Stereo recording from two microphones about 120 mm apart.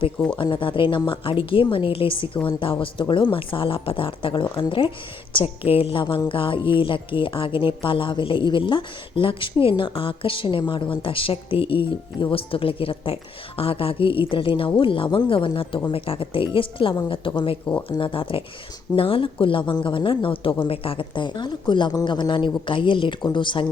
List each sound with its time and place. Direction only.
0.3 s speech: 45° left (ahead or behind)